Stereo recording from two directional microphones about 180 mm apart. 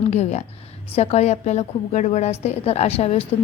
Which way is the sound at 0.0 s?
35° left (ahead or behind).